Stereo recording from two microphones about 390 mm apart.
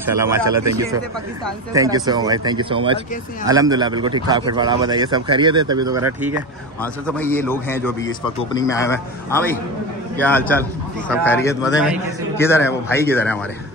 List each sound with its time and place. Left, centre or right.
0.4 s speech: right
1.7 s a man's voice: centre